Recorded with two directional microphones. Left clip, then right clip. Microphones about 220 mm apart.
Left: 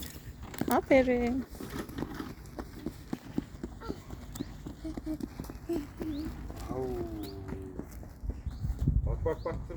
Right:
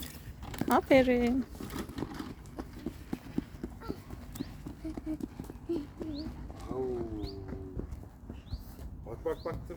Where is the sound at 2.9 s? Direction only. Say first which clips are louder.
Even; 20° left (ahead or behind).